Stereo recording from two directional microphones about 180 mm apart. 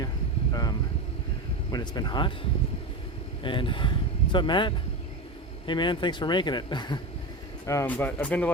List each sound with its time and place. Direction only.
1.7 s a man's voice: 25° left (ahead or behind)
3.4 s a man's voice: 25° left (ahead or behind)
7.7 s speech: 10° left (ahead or behind)